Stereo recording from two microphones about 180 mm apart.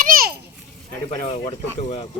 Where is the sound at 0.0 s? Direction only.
55° right (ahead or behind).